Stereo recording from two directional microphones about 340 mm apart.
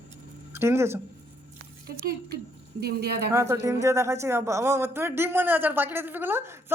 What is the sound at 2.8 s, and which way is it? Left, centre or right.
Speech, right.